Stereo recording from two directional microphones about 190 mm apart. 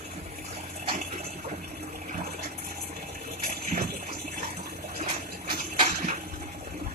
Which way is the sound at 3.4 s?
35° right (ahead or behind).